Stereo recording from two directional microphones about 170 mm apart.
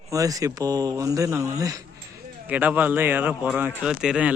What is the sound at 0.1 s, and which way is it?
Speech, 20° right (ahead or behind).